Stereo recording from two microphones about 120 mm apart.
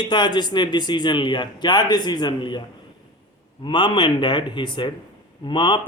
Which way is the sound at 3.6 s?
40° left (ahead or behind).